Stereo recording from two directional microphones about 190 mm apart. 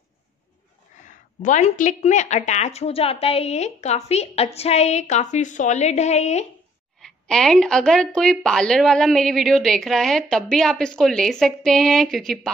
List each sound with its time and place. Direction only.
1.0 s speech: 40° left (ahead or behind)
7.0 s speech: 5° left (ahead or behind)